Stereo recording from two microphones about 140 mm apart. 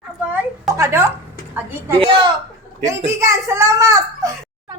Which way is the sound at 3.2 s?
20° right (ahead or behind).